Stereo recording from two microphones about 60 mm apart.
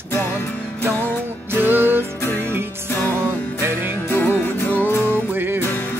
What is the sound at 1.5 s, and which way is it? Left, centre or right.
Music, right.